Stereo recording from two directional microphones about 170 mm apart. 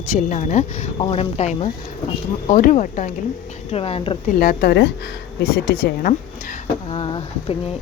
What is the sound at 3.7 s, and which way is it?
Speech, 35° left (ahead or behind).